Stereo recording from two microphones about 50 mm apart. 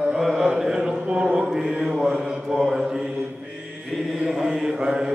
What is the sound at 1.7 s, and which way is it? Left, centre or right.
Mantra, centre.